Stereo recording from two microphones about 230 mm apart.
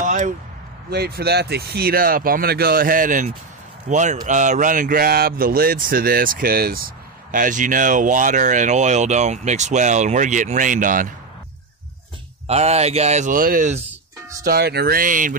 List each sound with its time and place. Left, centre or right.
0.0 s a sound: right
0.8 s speech: right
12.4 s speech: right